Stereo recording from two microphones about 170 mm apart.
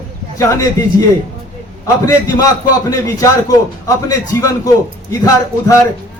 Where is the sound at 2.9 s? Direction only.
20° left (ahead or behind).